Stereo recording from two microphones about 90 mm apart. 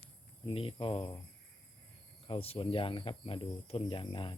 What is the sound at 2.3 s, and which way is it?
Speech, 85° left.